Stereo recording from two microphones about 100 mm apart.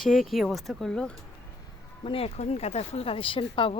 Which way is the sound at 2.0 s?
70° left (ahead or behind).